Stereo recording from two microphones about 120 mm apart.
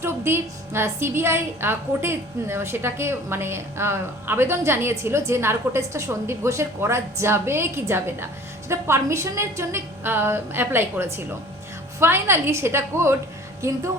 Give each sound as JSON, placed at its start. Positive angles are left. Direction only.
{"t": 0.0, "sound": "a woman's voice", "side_deg": -20}